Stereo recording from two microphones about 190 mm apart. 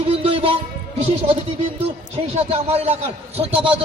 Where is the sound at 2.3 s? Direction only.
35° right (ahead or behind).